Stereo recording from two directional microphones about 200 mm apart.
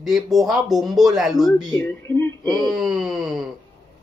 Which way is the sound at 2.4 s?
20° right (ahead or behind).